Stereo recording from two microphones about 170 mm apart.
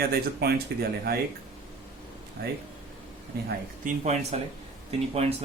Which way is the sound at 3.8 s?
40° right (ahead or behind).